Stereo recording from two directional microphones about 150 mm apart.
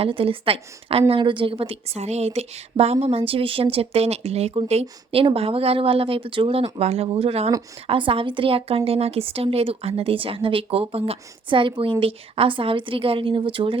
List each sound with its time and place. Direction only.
0.0 s a woman's voice: 40° right (ahead or behind)